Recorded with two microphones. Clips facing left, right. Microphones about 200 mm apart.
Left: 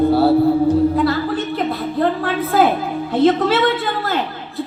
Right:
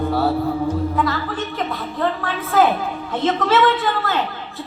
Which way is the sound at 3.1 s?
35° left (ahead or behind).